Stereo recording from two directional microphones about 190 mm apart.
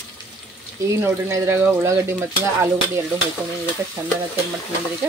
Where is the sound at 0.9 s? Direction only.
15° right (ahead or behind).